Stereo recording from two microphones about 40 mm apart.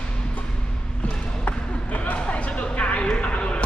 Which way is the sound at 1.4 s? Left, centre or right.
Left.